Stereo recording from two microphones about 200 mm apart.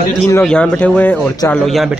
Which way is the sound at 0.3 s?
5° left (ahead or behind).